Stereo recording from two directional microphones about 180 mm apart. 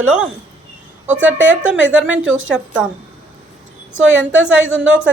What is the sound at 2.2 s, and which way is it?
Speech, 90° right.